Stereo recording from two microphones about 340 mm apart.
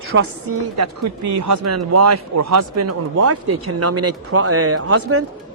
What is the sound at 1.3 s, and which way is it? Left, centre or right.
Speech, right.